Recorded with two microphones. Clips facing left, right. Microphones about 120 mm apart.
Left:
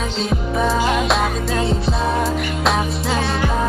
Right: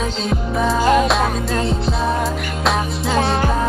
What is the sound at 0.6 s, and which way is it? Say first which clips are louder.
Music: right 4 dB; centre (ahead or behind).